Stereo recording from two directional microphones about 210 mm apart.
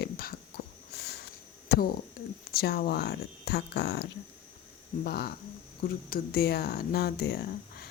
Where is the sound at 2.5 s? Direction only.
45° left (ahead or behind).